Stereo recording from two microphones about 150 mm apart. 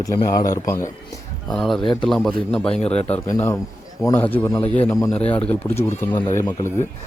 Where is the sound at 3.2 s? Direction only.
20° left (ahead or behind).